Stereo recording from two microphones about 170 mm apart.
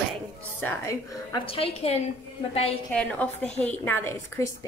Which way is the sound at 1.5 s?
35° left (ahead or behind).